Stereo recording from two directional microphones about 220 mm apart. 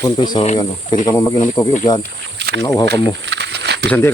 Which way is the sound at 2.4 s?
50° right (ahead or behind).